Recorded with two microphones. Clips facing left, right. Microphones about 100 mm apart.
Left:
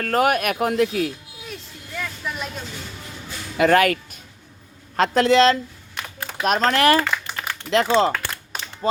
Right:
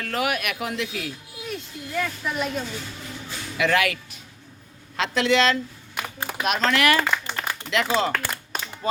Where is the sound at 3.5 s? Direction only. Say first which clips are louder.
Left 6 dB; 40° left (ahead or behind).